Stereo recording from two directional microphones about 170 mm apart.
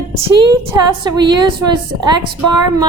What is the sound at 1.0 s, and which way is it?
A woman's voice, 25° right (ahead or behind).